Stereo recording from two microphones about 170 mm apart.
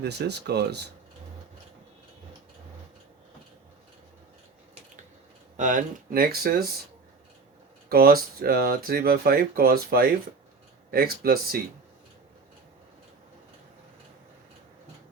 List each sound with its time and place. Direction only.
0.0 s speech: 75° right (ahead or behind)
5.5 s speech: 50° right (ahead or behind)
7.9 s speech: 65° right (ahead or behind)